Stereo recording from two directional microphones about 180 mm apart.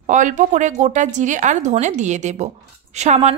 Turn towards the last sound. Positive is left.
turn(degrees=-40)  # may be behind; listen again after turning